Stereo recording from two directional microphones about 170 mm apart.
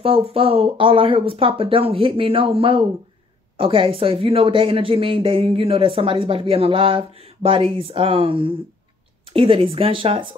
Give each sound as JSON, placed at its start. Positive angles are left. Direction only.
{"t": 0.0, "sound": "speech", "side_deg": -35}